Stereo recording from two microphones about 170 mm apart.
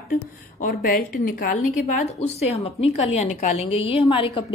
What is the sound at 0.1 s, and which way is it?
A woman's voice, 60° left (ahead or behind).